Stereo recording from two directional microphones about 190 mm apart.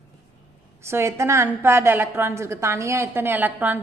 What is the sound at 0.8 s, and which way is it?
A woman's voice, 15° right (ahead or behind).